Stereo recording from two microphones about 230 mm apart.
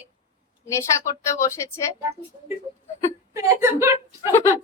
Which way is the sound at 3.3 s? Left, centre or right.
Centre.